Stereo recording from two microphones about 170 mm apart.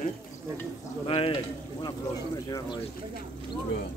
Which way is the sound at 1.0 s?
30° left (ahead or behind).